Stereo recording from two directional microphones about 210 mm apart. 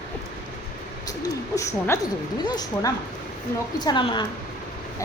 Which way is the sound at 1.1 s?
15° left (ahead or behind).